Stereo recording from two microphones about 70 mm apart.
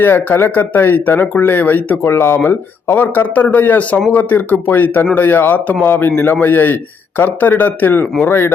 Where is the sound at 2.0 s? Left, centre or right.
Left.